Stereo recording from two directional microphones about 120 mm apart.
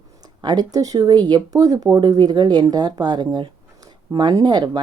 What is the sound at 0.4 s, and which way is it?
A woman's voice, 30° right (ahead or behind).